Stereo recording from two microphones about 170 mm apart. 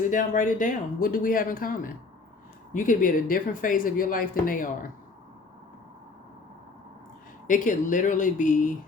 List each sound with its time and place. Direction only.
0.0 s speech: 50° left (ahead or behind)
7.4 s speech: 50° left (ahead or behind)